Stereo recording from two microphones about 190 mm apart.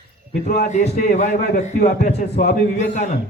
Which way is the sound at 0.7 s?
40° left (ahead or behind).